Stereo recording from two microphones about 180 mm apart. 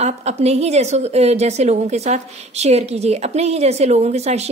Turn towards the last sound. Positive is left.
turn(degrees=-35)  # may be behind; listen again after turning